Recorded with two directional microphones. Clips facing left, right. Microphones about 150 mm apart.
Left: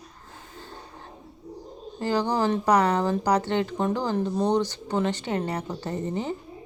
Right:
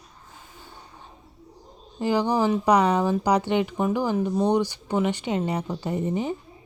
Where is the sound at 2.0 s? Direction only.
15° right (ahead or behind).